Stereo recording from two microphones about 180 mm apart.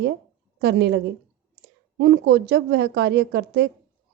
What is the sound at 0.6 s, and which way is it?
A woman's voice, 70° right (ahead or behind).